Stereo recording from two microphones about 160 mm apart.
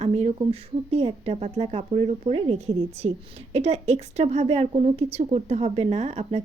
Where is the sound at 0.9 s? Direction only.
40° right (ahead or behind).